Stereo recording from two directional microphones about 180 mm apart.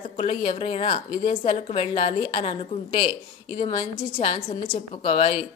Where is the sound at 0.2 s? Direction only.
30° left (ahead or behind).